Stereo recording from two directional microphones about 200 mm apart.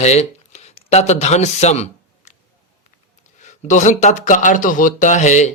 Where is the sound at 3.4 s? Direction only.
35° left (ahead or behind).